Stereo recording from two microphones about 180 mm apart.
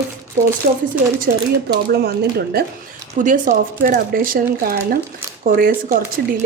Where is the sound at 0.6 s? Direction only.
55° right (ahead or behind).